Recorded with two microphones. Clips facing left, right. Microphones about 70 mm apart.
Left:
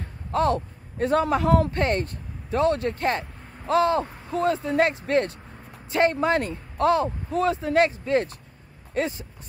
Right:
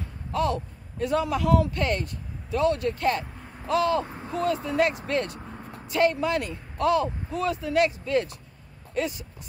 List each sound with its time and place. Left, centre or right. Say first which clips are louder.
0.0 s a man's voice: left 3 dB; left
4.0 s speech: left 2 dB; right
4.6 s speech: left 2 dB; left
5.4 s a sound: right 5 dB; right
5.9 s speech: left 2 dB; left